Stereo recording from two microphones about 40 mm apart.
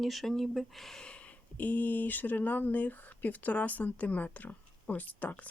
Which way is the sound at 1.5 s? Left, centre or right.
Left.